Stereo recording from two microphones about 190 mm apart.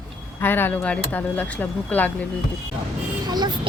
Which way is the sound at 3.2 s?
20° right (ahead or behind).